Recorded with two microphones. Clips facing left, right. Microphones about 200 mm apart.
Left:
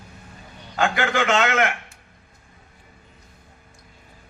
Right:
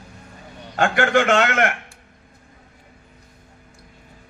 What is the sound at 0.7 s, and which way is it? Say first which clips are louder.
A man's voice: right 4 dB; 50° right (ahead or behind).